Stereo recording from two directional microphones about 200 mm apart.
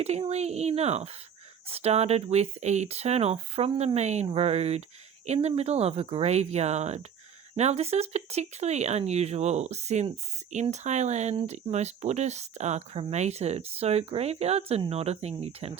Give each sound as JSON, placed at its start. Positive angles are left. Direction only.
{"t": 0.0, "sound": "speech", "side_deg": -35}